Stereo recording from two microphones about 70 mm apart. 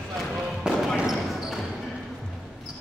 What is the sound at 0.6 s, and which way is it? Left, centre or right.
Basketball bounce, centre.